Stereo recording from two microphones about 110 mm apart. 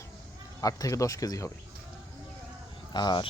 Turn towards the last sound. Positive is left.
turn(degrees=40)  # may be behind; listen again after turning